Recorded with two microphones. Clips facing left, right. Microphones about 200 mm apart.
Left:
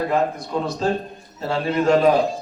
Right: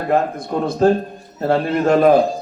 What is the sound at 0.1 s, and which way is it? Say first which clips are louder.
A man's voice: right 3 dB; 55° right (ahead or behind).